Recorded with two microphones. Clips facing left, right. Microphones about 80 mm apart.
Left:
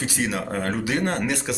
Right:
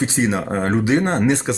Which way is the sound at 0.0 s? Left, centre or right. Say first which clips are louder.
Right 6 dB; right.